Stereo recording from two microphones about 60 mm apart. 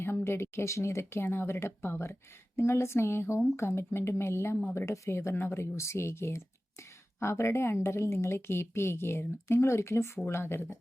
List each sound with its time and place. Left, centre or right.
0.3 s speech: left
5.5 s speech: left